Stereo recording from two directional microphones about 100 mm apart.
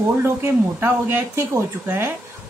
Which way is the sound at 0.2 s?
20° right (ahead or behind).